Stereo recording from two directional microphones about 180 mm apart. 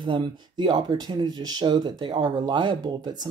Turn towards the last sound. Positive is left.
turn(degrees=-25)  # may be behind; listen again after turning